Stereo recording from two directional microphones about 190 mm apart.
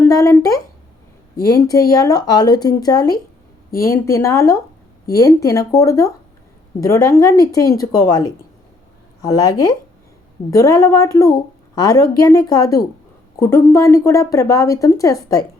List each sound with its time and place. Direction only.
0.0 s a woman's voice: 20° left (ahead or behind)